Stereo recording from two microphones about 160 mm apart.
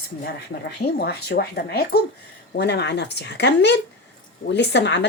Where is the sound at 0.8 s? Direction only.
90° left.